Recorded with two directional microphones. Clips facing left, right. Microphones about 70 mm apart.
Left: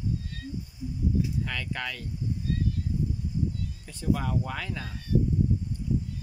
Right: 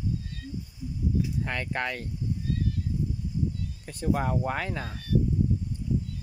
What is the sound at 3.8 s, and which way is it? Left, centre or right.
Speech, right.